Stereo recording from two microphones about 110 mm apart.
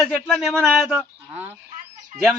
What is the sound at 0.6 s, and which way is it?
Speech, centre (ahead or behind).